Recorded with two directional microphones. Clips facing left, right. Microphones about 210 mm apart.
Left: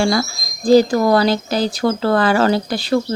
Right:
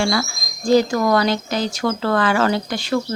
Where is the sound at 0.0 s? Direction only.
35° left (ahead or behind).